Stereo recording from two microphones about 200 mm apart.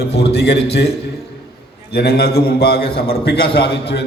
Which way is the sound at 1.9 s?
55° left (ahead or behind).